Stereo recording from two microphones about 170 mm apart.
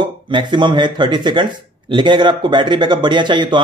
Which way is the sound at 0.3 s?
25° right (ahead or behind).